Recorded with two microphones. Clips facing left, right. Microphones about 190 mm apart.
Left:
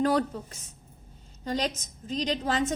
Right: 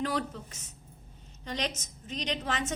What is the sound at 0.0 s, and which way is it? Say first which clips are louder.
Speech: left 7 dB; 40° left (ahead or behind).